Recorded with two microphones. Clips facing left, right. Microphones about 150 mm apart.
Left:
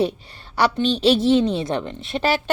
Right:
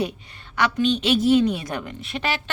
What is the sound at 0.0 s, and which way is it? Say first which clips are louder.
Speech: left 5 dB; 35° left (ahead or behind).